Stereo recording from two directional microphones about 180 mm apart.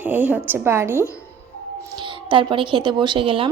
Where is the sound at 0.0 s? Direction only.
10° right (ahead or behind).